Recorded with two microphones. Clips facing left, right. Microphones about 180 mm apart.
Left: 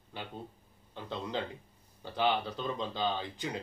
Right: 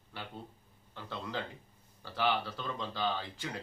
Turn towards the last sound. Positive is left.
turn(degrees=20)  # may be behind; listen again after turning